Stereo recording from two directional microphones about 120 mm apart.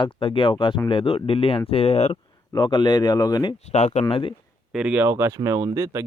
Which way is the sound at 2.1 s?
35° left (ahead or behind).